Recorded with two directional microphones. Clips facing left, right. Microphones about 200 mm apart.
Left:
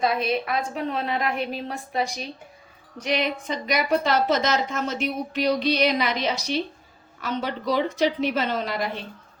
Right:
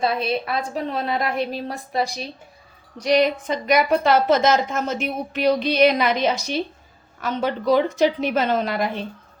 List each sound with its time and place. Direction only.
0.0 s a woman's voice: 30° right (ahead or behind); by 8.9 s 50° right (ahead or behind)